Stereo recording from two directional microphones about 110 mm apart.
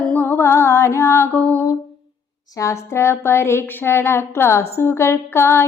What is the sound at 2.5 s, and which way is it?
A woman's voice, 25° left (ahead or behind).